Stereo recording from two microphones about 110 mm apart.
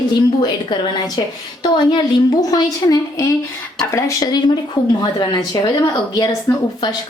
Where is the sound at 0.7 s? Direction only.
40° left (ahead or behind).